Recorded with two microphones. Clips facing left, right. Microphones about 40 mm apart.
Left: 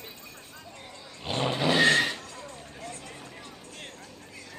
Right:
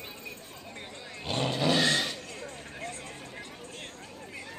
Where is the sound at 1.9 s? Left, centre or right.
Left.